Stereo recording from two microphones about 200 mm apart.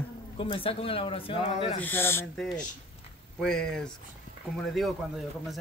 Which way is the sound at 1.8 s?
10° left (ahead or behind).